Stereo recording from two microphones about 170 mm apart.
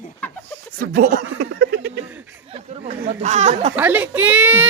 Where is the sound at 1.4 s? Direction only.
80° right.